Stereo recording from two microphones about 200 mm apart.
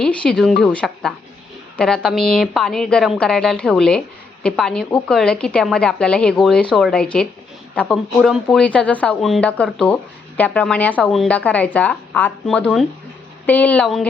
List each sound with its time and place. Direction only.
0.0 s a woman's voice: 5° left (ahead or behind)